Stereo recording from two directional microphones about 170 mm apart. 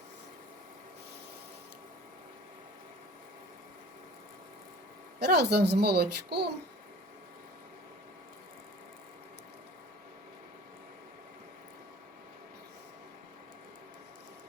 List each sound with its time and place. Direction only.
5.2 s speech: 75° right (ahead or behind)